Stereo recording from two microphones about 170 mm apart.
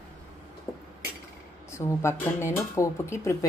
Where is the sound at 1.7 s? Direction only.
15° left (ahead or behind).